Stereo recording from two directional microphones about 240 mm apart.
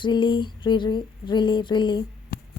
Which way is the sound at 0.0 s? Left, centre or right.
Centre.